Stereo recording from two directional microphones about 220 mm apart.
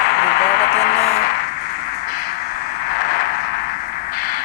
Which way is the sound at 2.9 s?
45° left (ahead or behind).